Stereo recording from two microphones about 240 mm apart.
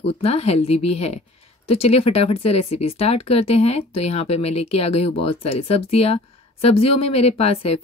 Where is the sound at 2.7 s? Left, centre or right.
Left.